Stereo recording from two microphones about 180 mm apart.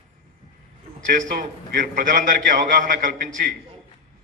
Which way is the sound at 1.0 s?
45° right (ahead or behind).